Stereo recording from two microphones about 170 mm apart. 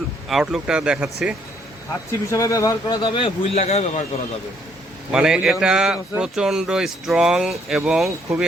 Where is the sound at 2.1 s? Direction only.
20° left (ahead or behind); by 4.0 s 40° left (ahead or behind).